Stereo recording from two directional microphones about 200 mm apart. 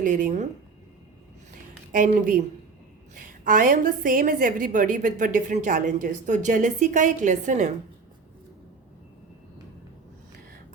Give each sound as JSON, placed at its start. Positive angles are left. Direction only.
{"t": 0.0, "sound": "a woman's voice", "side_deg": -40}
{"t": 1.9, "sound": "a woman's voice", "side_deg": -40}